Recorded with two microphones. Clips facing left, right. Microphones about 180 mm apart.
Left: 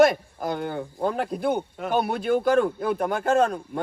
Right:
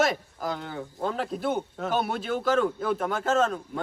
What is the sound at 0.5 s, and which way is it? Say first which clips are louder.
Speech: left 6 dB; 55° left (ahead or behind).